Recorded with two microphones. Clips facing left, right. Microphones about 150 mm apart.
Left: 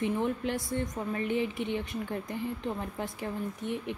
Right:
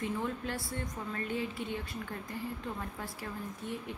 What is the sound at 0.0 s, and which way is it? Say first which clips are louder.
Speech: left 6 dB; 20° left (ahead or behind).